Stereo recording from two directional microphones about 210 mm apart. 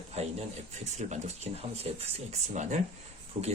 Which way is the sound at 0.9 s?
30° right (ahead or behind).